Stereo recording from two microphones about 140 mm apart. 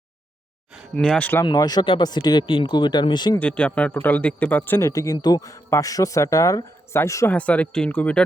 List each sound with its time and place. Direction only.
0.9 s speech: 10° left (ahead or behind)
1.5 s speech: 30° left (ahead or behind)
3.3 s a man's voice: 10° left (ahead or behind)
7.3 s speech: 10° left (ahead or behind)